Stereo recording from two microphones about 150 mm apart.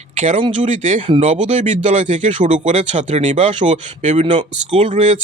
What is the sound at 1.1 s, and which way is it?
Speech, 35° right (ahead or behind).